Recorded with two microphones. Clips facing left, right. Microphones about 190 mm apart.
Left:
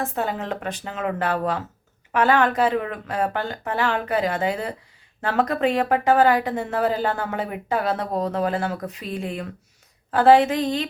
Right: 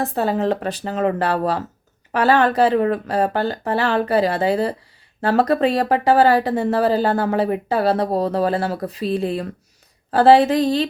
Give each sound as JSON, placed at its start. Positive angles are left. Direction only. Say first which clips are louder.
{"t": 0.0, "sound": "speech", "louder": "right 6 dB", "side_deg": -35}